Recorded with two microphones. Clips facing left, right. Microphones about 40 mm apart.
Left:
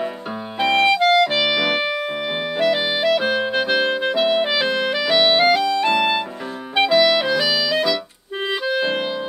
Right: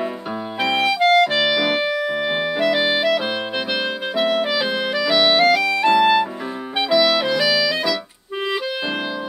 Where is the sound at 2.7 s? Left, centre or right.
Centre.